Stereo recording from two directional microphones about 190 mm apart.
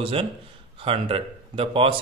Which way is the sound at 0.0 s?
30° right (ahead or behind).